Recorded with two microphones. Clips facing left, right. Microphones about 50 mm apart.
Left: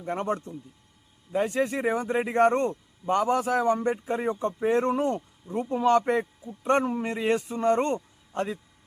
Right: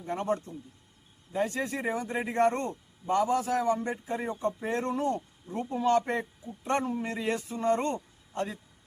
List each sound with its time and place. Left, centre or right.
0.1 s a man's voice: left
1.3 s a man's voice: left
5.7 s a man's voice: left
7.9 s a sound: left